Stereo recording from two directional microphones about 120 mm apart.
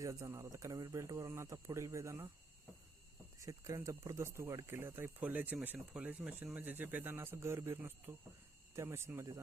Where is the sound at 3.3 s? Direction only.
25° right (ahead or behind).